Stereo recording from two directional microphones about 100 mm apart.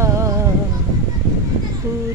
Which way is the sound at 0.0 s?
30° right (ahead or behind).